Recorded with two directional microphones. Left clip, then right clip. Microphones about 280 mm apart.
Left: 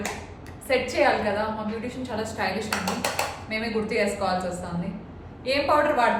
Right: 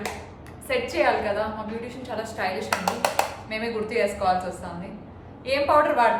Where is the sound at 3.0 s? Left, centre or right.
Centre.